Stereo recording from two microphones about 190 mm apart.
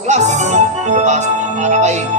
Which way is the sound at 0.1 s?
40° right (ahead or behind).